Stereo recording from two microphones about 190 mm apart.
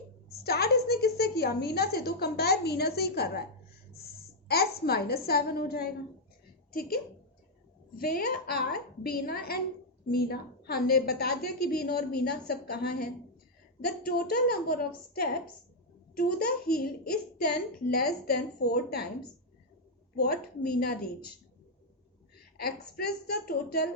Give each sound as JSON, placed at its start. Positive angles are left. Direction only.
{"t": 0.4, "sound": "a woman's voice", "side_deg": 55}
{"t": 4.4, "sound": "a woman's voice", "side_deg": 55}
{"t": 7.9, "sound": "a woman's voice", "side_deg": 55}
{"t": 20.1, "sound": "a woman's voice", "side_deg": 55}
{"t": 22.5, "sound": "a woman's voice", "side_deg": 55}